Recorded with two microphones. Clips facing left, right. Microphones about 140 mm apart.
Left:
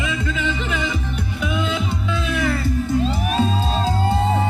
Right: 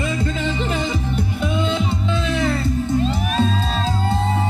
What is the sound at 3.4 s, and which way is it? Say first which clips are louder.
Music: even; 10° left (ahead or behind).